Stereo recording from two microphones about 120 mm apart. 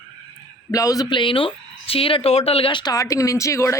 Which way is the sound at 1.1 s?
45° left (ahead or behind).